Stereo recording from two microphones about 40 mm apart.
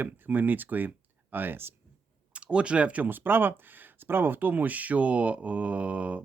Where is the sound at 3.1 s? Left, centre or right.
Right.